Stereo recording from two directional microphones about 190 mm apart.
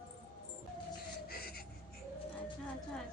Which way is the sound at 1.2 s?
55° left (ahead or behind).